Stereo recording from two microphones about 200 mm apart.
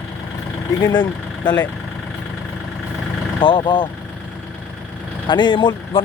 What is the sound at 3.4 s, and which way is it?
Speech, 25° left (ahead or behind).